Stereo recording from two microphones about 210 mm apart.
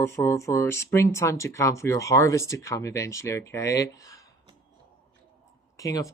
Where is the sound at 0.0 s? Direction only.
15° left (ahead or behind).